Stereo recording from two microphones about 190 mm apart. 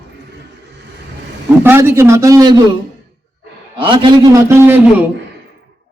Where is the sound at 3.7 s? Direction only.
25° right (ahead or behind).